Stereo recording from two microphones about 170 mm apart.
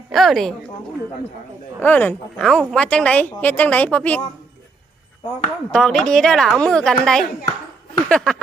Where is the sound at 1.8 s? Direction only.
10° left (ahead or behind).